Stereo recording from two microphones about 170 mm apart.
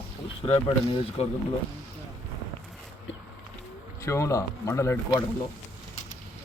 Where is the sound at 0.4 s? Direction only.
30° left (ahead or behind).